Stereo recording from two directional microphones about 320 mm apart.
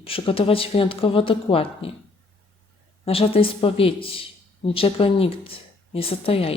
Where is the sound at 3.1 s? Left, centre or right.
Centre.